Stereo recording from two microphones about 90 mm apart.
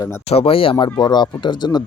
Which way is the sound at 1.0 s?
55° left (ahead or behind).